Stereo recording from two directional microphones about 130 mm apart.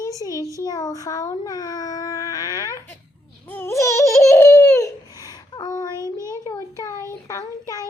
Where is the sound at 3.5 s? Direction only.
20° left (ahead or behind).